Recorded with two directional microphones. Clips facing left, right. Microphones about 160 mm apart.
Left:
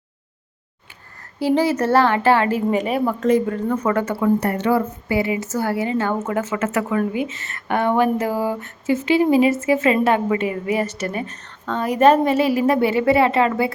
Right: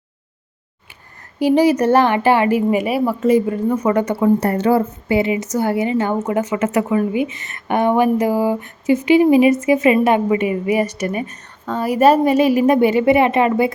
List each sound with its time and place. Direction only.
1.4 s a woman's voice: 15° right (ahead or behind)